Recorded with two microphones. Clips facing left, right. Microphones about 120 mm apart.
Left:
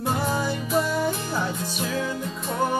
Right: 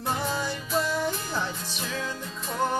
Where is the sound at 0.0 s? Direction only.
10° left (ahead or behind).